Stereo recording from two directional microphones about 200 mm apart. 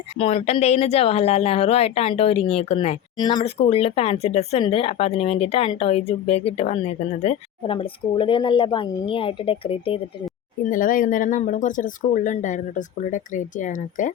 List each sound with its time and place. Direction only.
0.2 s speech: 30° left (ahead or behind)
10.6 s speech: 40° left (ahead or behind)